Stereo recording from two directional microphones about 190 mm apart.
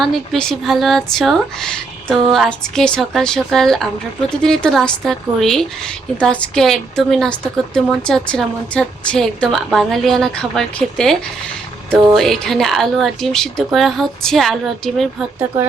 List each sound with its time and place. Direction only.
0.0 s a woman's voice: centre (ahead or behind)